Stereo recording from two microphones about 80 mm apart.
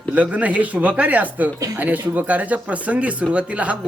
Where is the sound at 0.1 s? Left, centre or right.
Centre.